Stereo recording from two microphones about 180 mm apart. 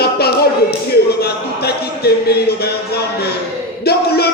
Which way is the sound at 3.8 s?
60° left (ahead or behind).